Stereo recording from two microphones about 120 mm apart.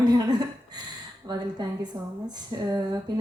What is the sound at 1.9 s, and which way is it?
Speech, 20° right (ahead or behind).